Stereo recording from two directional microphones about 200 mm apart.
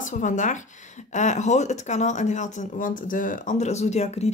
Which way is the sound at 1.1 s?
35° left (ahead or behind).